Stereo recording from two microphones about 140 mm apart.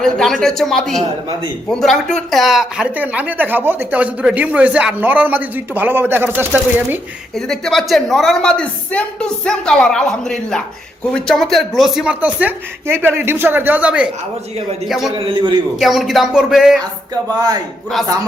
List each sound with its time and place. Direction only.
0.0 s speech: centre (ahead or behind); by 7.0 s 15° right (ahead or behind)
7.3 s speech: 5° left (ahead or behind)
15.1 s a man's voice: 40° right (ahead or behind)
15.8 s speech: centre (ahead or behind)